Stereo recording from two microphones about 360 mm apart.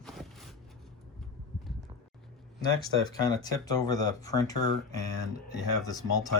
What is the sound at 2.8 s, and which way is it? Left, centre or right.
Speech, centre.